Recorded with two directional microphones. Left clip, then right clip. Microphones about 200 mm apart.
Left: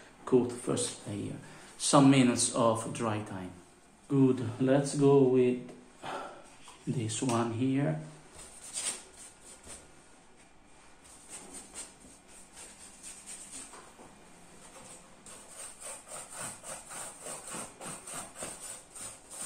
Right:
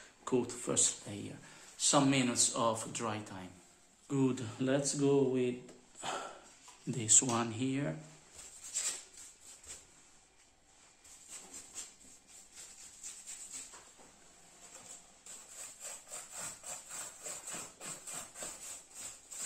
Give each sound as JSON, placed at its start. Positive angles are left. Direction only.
{"t": 0.2, "sound": "speech", "side_deg": -45}
{"t": 1.8, "sound": "speech", "side_deg": -15}
{"t": 4.1, "sound": "speech", "side_deg": -40}
{"t": 5.9, "sound": "a sound", "side_deg": -45}
{"t": 7.0, "sound": "speech", "side_deg": -45}